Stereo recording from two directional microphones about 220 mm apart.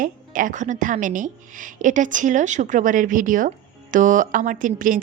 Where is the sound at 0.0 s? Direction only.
35° right (ahead or behind).